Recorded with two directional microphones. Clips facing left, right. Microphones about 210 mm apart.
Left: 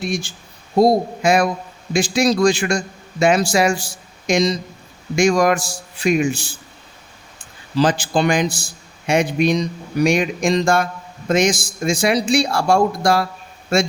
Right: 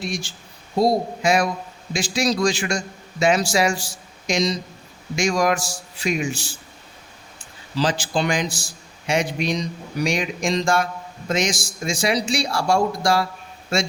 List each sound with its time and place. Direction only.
0.0 s a man's voice: 55° left (ahead or behind)
7.8 s a man's voice: 55° left (ahead or behind)